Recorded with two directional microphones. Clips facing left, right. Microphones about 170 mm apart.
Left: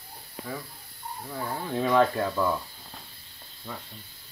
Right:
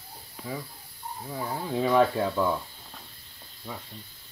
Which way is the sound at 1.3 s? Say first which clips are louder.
Right 1 dB; 5° right (ahead or behind).